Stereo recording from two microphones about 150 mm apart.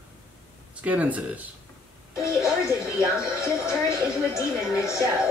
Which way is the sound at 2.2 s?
20° left (ahead or behind).